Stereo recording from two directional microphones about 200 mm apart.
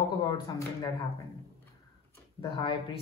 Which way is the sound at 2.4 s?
20° left (ahead or behind).